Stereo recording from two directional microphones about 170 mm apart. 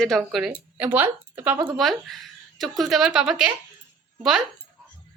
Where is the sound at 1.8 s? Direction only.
Centre (ahead or behind).